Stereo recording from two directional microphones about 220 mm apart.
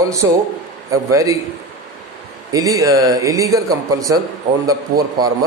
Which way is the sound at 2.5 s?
15° right (ahead or behind).